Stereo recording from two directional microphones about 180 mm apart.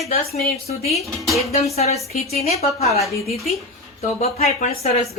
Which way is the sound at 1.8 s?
35° left (ahead or behind).